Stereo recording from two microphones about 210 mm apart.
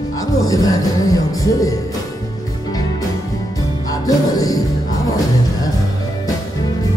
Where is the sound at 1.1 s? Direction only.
15° left (ahead or behind).